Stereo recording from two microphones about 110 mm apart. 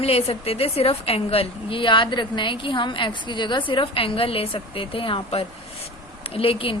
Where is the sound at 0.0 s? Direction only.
65° left (ahead or behind).